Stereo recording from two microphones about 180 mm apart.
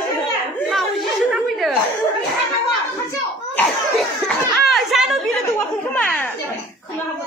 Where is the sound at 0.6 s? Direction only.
Centre (ahead or behind).